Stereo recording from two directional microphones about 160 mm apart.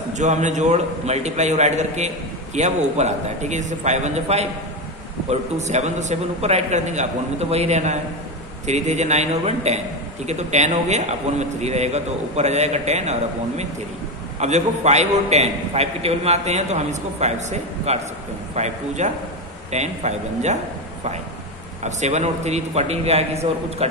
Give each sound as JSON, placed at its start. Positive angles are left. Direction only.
{"t": 0.2, "sound": "a man's voice", "side_deg": -50}
{"t": 21.8, "sound": "a man's voice", "side_deg": -45}